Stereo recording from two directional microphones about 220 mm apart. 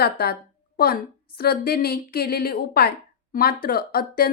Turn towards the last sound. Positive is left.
turn(degrees=45)  # may be behind; listen again after turning